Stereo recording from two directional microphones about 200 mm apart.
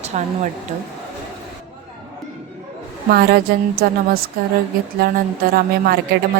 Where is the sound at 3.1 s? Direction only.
50° right (ahead or behind).